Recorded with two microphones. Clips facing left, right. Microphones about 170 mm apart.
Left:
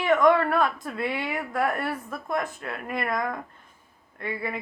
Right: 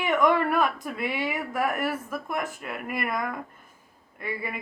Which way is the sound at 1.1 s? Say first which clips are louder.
Even; 10° right (ahead or behind).